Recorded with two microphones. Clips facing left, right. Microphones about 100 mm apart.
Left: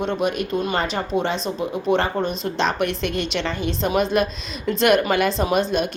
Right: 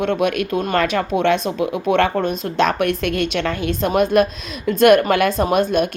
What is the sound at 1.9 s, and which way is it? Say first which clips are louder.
Speech: right 6 dB; 60° right (ahead or behind).